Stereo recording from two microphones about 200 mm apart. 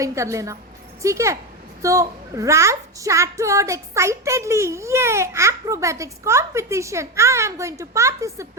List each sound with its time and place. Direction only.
0.0 s a woman's voice: 15° right (ahead or behind)